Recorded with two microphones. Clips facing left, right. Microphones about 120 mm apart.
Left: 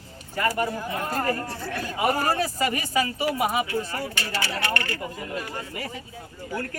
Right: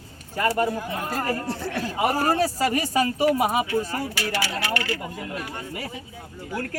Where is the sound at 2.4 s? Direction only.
40° right (ahead or behind).